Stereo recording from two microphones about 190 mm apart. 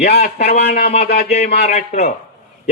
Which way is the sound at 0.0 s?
60° left (ahead or behind).